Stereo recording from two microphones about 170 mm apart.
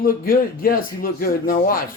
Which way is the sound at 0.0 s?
55° left (ahead or behind).